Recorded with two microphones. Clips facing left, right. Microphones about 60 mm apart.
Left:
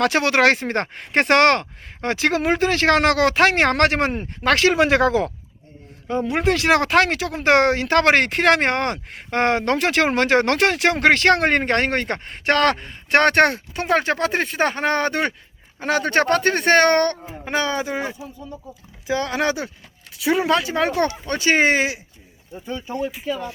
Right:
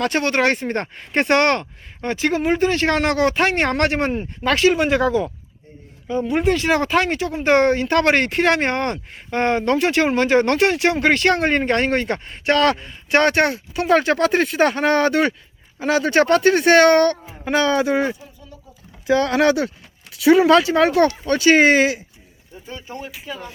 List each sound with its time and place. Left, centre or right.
0.0 s speech: left
4.5 s speech: left
6.1 s speech: left
15.8 s speech: left
17.4 s speech: centre
17.8 s speech: centre
21.0 s speech: left